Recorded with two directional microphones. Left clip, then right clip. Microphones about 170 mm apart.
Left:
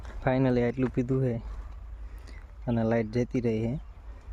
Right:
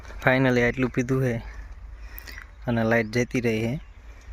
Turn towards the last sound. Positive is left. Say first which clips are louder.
# right 4 dB
turn(degrees=0)  # may be behind; listen again after turning